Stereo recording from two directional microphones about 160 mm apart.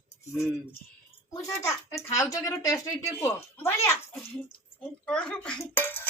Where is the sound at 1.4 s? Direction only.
20° left (ahead or behind).